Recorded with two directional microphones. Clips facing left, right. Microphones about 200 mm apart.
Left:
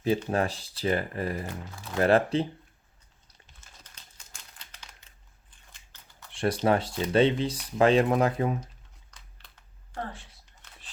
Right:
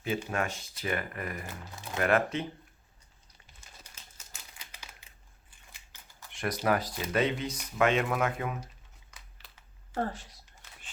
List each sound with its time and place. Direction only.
0.3 s speech: 35° left (ahead or behind)
3.6 s crumpling: 10° right (ahead or behind)
6.3 s speech: 30° left (ahead or behind)
9.1 s a sound: 5° right (ahead or behind)
10.0 s speech: 40° right (ahead or behind)